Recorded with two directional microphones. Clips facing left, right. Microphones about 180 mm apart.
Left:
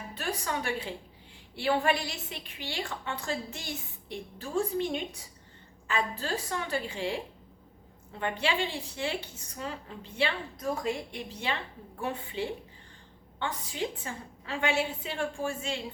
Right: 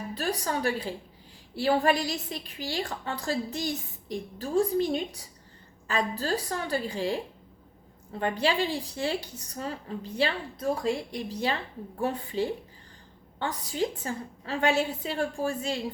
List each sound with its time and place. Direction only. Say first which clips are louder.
0.1 s a woman's voice: right 3 dB; 35° right (ahead or behind)
8.2 s a woman's voice: right 4 dB; 40° right (ahead or behind)